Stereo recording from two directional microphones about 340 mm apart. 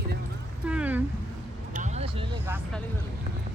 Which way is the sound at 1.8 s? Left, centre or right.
Centre.